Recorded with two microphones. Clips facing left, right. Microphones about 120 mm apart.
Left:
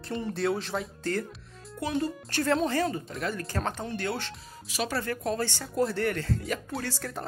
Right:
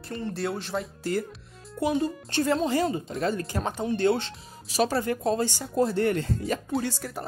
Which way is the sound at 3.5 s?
10° right (ahead or behind).